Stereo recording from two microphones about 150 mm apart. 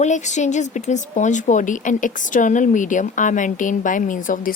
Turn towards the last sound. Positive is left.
turn(degrees=60)  # may be behind; listen again after turning